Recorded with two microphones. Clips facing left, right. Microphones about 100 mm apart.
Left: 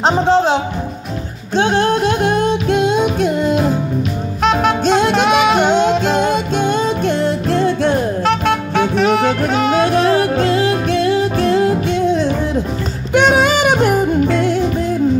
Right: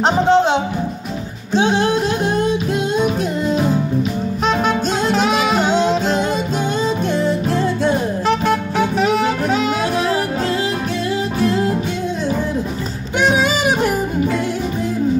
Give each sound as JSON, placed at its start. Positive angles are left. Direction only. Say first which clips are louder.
{"t": 0.0, "sound": "speech", "louder": "left 1 dB", "side_deg": 0}
{"t": 2.2, "sound": "music", "louder": "left 3 dB", "side_deg": 70}
{"t": 3.4, "sound": "music", "louder": "right 1 dB", "side_deg": 0}
{"t": 4.8, "sound": "music", "louder": "left 4 dB", "side_deg": 75}
{"t": 5.9, "sound": "music", "louder": "left 3 dB", "side_deg": 0}
{"t": 9.0, "sound": "saxophone", "louder": "left 3 dB", "side_deg": 80}
{"t": 9.6, "sound": "music", "louder": "left 5 dB", "side_deg": 60}
{"t": 11.4, "sound": "music", "louder": "left 2 dB", "side_deg": 0}
{"t": 13.1, "sound": "music", "louder": "left 4 dB", "side_deg": 70}